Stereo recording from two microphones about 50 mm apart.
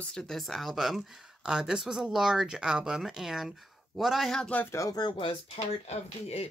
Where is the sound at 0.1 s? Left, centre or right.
Centre.